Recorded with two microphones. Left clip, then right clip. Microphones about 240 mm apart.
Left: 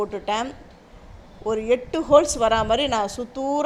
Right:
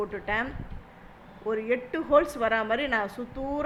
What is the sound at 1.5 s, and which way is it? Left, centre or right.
A woman's voice, left.